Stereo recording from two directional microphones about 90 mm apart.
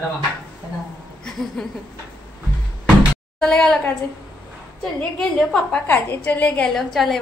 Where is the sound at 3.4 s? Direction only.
10° left (ahead or behind).